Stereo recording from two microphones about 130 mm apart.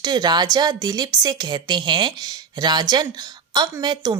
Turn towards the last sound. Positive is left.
turn(degrees=-35)  # may be behind; listen again after turning